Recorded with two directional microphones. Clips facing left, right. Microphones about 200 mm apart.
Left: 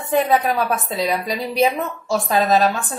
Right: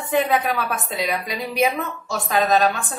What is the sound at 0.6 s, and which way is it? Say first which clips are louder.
A woman's voice: left 4 dB; 35° left (ahead or behind).